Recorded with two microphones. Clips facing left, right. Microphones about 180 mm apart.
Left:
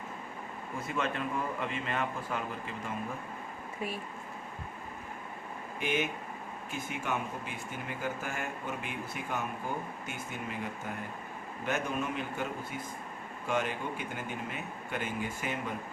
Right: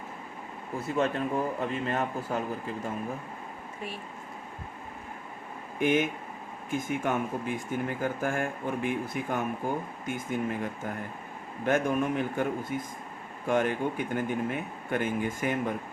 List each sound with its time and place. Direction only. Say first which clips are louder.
0.9 s a man's voice: right 6 dB; 35° right (ahead or behind)
5.8 s speech: right 7 dB; 50° right (ahead or behind)